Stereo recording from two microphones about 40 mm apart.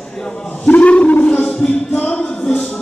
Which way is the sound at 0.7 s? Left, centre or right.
Left.